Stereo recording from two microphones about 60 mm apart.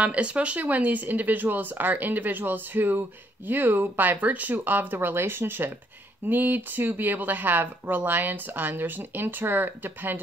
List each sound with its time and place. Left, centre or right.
0.0 s speech: right
4.6 s speech: right